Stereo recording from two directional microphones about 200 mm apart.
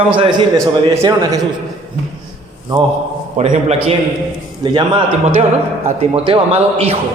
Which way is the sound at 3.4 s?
35° right (ahead or behind).